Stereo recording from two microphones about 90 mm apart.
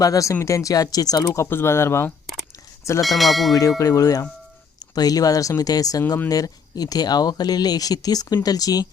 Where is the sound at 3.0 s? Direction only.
Centre (ahead or behind).